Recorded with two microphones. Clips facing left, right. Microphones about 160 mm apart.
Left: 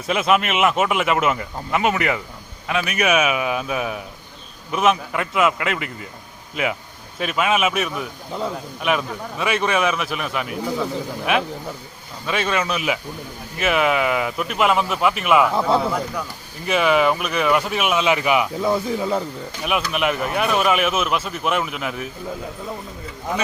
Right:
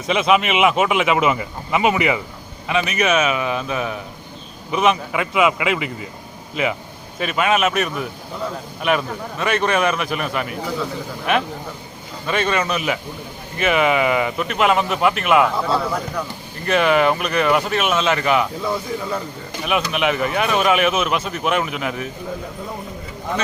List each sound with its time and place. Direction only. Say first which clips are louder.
0.1 s speech: right 2 dB; 5° left (ahead or behind)
15.5 s a man's voice: left 2 dB; 20° left (ahead or behind)
16.6 s speech: right 1 dB; 5° left (ahead or behind)
19.6 s speech: right 2 dB; centre (ahead or behind)